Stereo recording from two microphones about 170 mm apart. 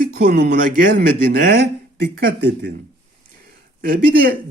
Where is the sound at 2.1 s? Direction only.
75° right (ahead or behind).